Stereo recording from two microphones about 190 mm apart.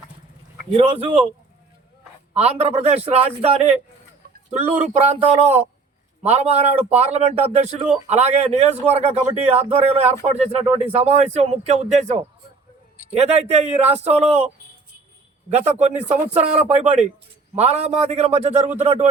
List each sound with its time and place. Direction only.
0.8 s a man's voice: 30° right (ahead or behind)
2.3 s a man's voice: 35° right (ahead or behind)
4.8 s a man's voice: 35° right (ahead or behind)
15.4 s a man's voice: 35° right (ahead or behind)